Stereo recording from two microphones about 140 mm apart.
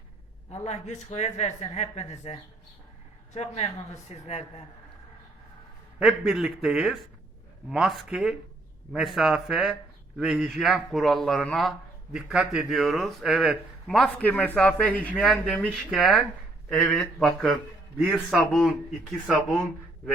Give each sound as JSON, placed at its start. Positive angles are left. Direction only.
{"t": 0.5, "sound": "a woman's voice", "side_deg": 55}
{"t": 6.0, "sound": "speech", "side_deg": -5}
{"t": 12.1, "sound": "speech", "side_deg": -5}